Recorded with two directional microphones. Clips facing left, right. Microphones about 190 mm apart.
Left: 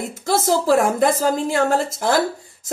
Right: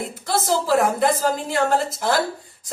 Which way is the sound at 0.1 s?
45° left (ahead or behind).